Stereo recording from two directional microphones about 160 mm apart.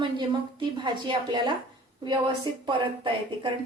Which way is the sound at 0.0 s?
30° right (ahead or behind).